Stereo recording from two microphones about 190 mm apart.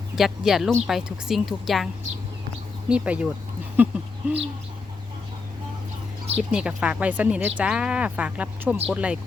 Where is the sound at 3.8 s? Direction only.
10° right (ahead or behind).